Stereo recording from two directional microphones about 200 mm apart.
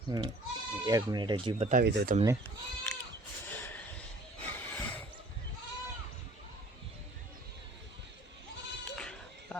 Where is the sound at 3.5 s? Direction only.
10° left (ahead or behind).